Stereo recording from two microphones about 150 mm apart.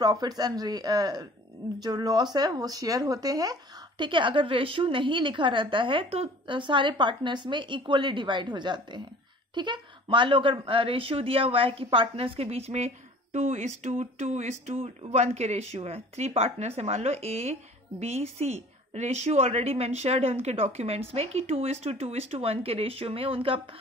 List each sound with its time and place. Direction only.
0.0 s a woman's voice: 25° right (ahead or behind)